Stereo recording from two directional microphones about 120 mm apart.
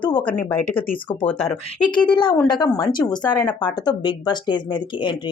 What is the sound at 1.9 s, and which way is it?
Speech, 40° left (ahead or behind).